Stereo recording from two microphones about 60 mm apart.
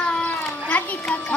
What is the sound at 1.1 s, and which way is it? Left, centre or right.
Music, left.